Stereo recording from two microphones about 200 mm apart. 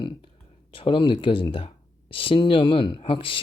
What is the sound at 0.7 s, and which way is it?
Speech, 25° left (ahead or behind).